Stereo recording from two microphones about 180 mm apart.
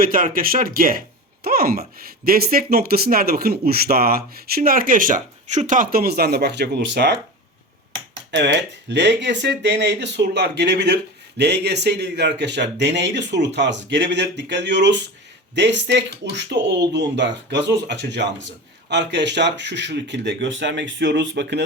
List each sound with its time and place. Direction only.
0.0 s speech: 50° right (ahead or behind); by 7.2 s 70° right (ahead or behind)
8.3 s speech: 75° right (ahead or behind)